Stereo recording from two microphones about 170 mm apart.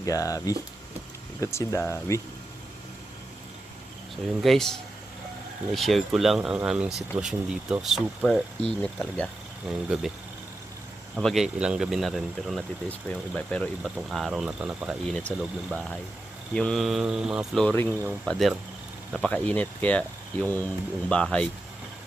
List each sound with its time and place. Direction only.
0.0 s speech: 20° left (ahead or behind)
4.4 s speech: centre (ahead or behind)
5.7 s speech: centre (ahead or behind)
11.1 s speech: centre (ahead or behind)